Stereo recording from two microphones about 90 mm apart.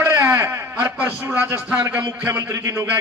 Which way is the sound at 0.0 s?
30° right (ahead or behind).